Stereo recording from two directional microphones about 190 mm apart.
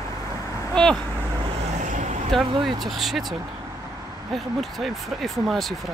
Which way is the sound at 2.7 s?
Centre (ahead or behind).